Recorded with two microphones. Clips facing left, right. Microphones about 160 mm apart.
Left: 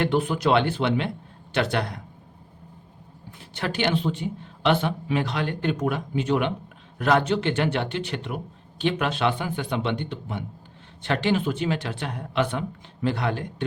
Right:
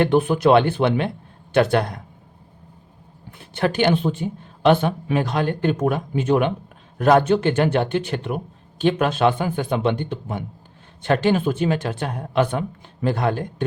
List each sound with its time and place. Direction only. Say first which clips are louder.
0.0 s a man's voice: right 6 dB; 50° right (ahead or behind)
3.3 s a man's voice: right 7 dB; 55° right (ahead or behind)